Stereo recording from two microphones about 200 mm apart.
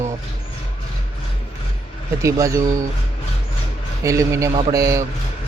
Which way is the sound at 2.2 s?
15° right (ahead or behind).